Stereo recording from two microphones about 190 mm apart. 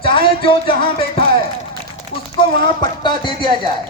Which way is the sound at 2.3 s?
25° left (ahead or behind).